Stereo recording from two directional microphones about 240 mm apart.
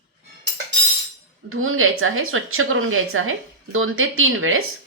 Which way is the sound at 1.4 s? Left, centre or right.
Right.